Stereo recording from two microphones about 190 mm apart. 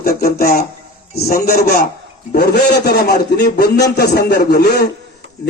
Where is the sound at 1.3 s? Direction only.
55° left (ahead or behind).